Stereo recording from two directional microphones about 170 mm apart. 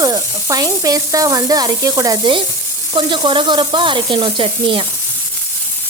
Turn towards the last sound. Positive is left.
turn(degrees=-30)  # may be behind; listen again after turning